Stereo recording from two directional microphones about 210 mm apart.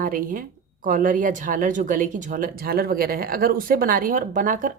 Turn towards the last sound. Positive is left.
turn(degrees=-40)  # may be behind; listen again after turning